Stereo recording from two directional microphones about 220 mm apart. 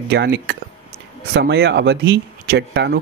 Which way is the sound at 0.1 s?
50° right (ahead or behind).